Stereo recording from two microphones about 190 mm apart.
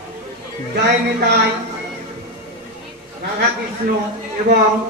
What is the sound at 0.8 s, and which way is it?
Speech, 60° right (ahead or behind).